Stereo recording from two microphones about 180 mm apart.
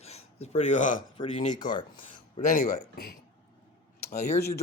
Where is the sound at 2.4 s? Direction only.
50° left (ahead or behind).